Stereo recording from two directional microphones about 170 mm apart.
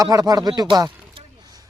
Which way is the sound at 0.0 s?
20° right (ahead or behind).